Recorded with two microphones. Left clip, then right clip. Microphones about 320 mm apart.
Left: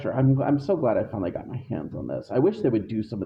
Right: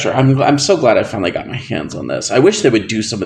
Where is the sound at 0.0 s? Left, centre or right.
Left.